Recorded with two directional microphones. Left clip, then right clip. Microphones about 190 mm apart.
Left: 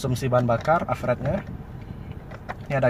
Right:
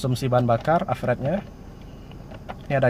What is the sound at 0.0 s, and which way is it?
Speech, 15° right (ahead or behind).